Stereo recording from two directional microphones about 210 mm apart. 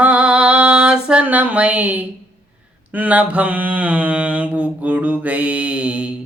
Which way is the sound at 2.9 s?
5° right (ahead or behind).